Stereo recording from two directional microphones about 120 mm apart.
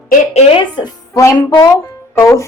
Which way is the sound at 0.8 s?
25° left (ahead or behind).